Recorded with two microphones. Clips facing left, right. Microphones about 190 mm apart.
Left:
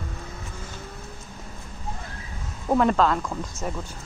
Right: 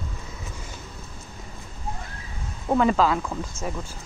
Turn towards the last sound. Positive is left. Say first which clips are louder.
# even
turn(degrees=0)  # may be behind; listen again after turning